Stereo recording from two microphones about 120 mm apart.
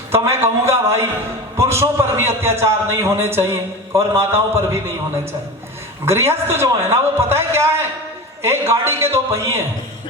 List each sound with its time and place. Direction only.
0.1 s a man's voice: 20° right (ahead or behind)
6.1 s a man's voice: 20° right (ahead or behind)